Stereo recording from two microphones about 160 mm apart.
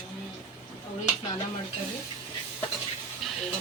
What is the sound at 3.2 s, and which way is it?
Hiss, centre (ahead or behind).